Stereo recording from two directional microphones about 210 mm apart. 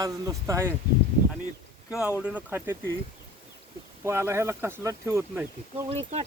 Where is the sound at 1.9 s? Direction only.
5° right (ahead or behind).